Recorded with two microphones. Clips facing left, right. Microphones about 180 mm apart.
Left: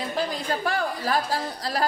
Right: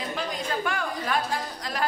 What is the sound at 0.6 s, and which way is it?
A woman's voice, 35° left (ahead or behind).